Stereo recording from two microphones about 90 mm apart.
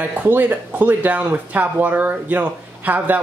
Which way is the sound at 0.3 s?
20° right (ahead or behind).